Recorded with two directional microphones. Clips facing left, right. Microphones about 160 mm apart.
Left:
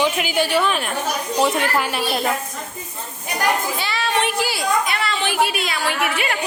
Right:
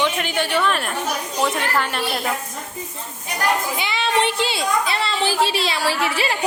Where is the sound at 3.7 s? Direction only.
20° right (ahead or behind).